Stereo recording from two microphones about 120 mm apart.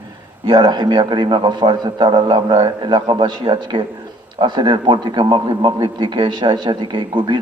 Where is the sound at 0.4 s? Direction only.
40° right (ahead or behind).